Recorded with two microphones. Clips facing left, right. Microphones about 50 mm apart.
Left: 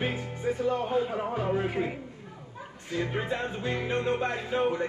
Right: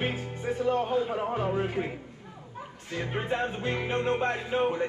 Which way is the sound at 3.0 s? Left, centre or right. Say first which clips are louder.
Even; right.